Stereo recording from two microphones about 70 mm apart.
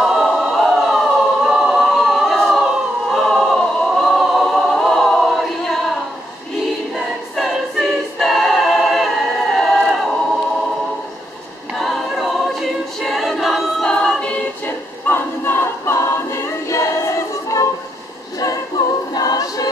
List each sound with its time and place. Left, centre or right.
0.0 s choir: centre
7.0 s choir: centre
11.7 s choir: centre
13.8 s choir: centre
15.0 s choir: left
19.1 s choir: left